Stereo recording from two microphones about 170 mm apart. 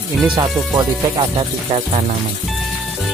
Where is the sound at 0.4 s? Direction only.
30° right (ahead or behind).